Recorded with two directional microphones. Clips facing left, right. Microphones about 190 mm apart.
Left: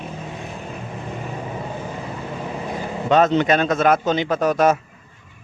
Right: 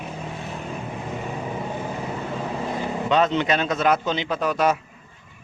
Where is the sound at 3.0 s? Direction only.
45° left (ahead or behind).